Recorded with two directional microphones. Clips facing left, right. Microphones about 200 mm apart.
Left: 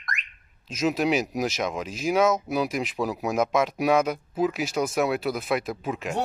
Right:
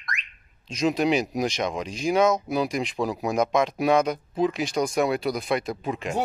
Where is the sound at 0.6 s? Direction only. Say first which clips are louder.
Right 1 dB; 5° left (ahead or behind).